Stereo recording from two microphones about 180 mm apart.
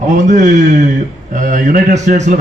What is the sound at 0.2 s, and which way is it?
A man's voice, 40° right (ahead or behind).